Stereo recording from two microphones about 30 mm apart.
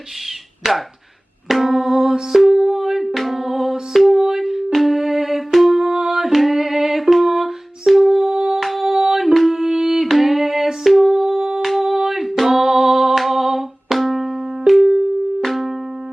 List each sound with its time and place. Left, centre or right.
0.7 s music: centre
1.9 s music: centre
4.9 s music: centre
5.9 s singing: right
6.1 s music: centre
8.3 s music: right
8.5 s music: centre
8.9 s a sound: centre
9.5 s music: centre
11.6 s music: centre
11.9 s music: centre